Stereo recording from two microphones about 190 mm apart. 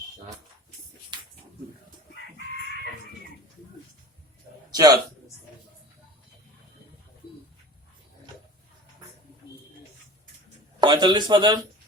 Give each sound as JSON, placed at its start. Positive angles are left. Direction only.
{"t": 4.7, "sound": "a man's voice", "side_deg": -20}
{"t": 10.8, "sound": "speech", "side_deg": -25}